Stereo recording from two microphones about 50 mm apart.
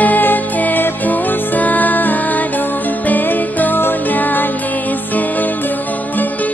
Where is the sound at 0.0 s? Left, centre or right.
Left.